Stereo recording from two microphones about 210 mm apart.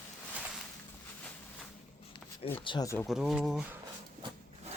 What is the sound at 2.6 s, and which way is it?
Speech, 20° left (ahead or behind).